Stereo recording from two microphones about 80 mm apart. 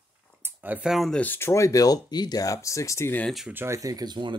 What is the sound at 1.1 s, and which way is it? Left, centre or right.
Speech, left.